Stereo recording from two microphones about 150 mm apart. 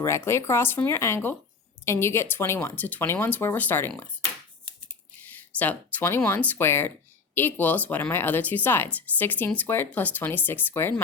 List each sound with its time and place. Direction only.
0.0 s speech: 15° left (ahead or behind)
5.2 s speech: 10° left (ahead or behind)